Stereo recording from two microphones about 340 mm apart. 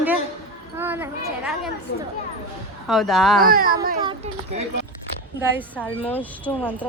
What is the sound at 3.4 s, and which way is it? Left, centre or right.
Speech, right.